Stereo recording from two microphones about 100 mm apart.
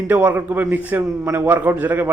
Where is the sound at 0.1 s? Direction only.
15° right (ahead or behind).